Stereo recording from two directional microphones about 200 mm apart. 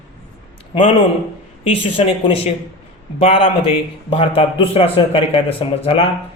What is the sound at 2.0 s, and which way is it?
A man's voice, 25° left (ahead or behind).